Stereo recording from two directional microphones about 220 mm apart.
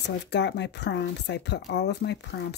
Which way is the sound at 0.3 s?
50° left (ahead or behind).